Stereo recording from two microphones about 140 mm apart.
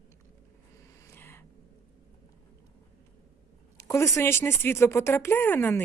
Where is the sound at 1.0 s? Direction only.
15° left (ahead or behind).